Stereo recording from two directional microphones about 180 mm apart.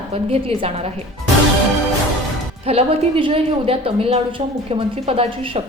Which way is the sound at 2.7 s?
30° right (ahead or behind).